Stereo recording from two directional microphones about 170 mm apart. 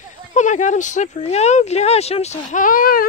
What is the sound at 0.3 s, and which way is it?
Speech, 45° left (ahead or behind).